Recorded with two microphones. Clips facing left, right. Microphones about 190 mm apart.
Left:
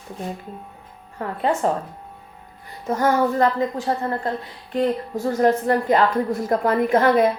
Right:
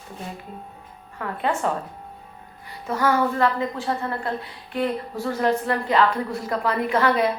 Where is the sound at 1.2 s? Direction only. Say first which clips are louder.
Left 2 dB; 35° left (ahead or behind).